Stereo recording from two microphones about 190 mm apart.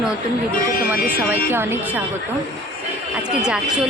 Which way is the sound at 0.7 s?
45° left (ahead or behind).